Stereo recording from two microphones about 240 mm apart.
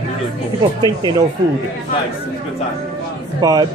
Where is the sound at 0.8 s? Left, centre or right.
Centre.